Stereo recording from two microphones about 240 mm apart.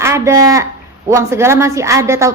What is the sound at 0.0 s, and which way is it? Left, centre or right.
Speech, centre.